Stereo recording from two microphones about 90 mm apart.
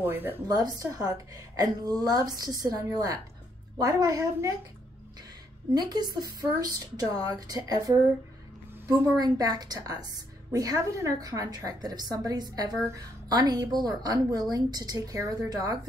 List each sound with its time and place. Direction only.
0.0 s a woman's voice: 20° right (ahead or behind)
0.5 s a woman's voice: 45° right (ahead or behind)
5.8 s a woman's voice: 50° right (ahead or behind)
9.2 s a woman's voice: 45° right (ahead or behind)